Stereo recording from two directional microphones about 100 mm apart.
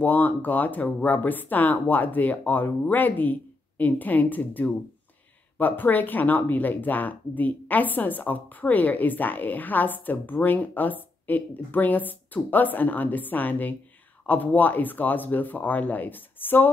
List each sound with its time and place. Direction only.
0.0 s speech: 15° left (ahead or behind)